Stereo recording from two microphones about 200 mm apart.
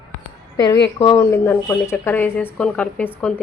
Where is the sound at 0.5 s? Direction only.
20° left (ahead or behind).